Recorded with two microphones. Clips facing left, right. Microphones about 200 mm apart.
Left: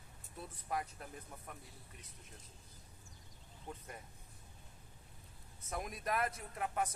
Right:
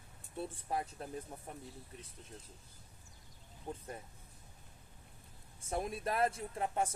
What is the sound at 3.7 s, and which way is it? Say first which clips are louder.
Speech: right 5 dB; 30° right (ahead or behind).